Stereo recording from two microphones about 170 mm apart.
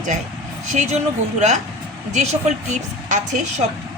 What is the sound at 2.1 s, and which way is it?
A woman's voice, 40° right (ahead or behind).